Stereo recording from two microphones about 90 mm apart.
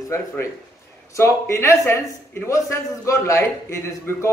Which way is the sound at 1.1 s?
30° left (ahead or behind).